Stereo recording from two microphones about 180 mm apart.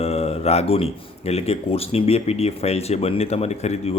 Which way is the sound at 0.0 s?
35° left (ahead or behind).